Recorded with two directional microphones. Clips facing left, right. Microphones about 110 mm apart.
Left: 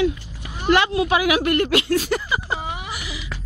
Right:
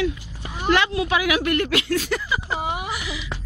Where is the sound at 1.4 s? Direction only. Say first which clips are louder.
Left 2 dB; 30° left (ahead or behind).